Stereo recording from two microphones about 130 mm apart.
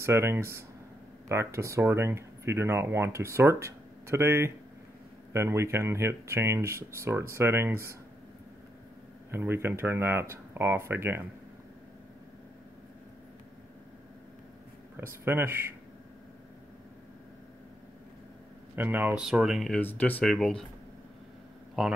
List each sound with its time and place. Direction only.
0.0 s speech: 20° right (ahead or behind)
9.3 s speech: 20° right (ahead or behind)
15.0 s speech: 15° right (ahead or behind)
18.8 s speech: 15° right (ahead or behind)
19.7 s speech: 10° left (ahead or behind)
21.8 s speech: centre (ahead or behind)